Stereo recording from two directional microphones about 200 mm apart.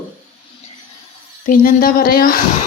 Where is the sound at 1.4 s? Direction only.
40° left (ahead or behind).